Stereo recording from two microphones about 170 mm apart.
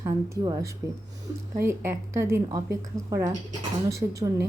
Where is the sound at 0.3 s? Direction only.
20° right (ahead or behind).